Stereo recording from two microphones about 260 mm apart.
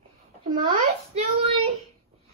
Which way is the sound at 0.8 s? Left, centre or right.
Right.